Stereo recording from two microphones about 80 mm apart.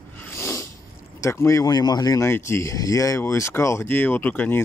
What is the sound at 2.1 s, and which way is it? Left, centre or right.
Speech, left.